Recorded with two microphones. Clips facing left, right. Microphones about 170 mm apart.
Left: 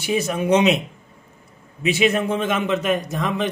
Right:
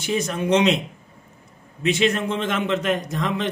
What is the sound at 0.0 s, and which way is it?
Speech, 10° left (ahead or behind).